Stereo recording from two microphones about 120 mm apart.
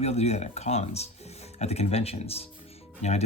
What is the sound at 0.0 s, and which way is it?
Speech, 60° left (ahead or behind).